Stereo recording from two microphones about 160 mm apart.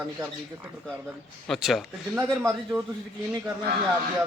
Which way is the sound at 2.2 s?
20° right (ahead or behind).